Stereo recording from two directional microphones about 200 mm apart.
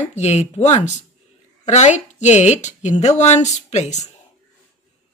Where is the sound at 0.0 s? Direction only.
35° left (ahead or behind).